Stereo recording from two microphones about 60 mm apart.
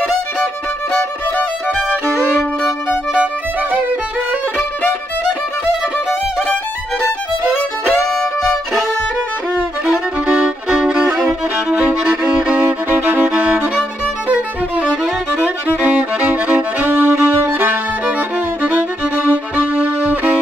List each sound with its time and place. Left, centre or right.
1.9 s music: left
7.8 s music: centre
9.6 s music: right
11.1 s violin: right
14.3 s music: centre